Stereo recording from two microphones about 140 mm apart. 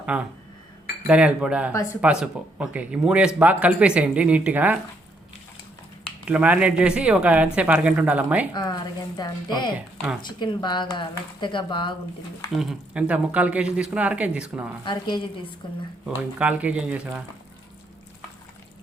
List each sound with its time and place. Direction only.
0.0 s speech: 10° right (ahead or behind)
1.7 s speech: 20° left (ahead or behind)
2.0 s speech: 5° right (ahead or behind)
6.2 s speech: 10° right (ahead or behind)
8.5 s speech: 30° left (ahead or behind)
12.5 s speech: 10° right (ahead or behind)
14.8 s speech: 35° left (ahead or behind)
16.0 s speech: 10° right (ahead or behind)